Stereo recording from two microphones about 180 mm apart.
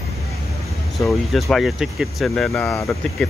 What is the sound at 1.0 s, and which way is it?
Speech, centre (ahead or behind).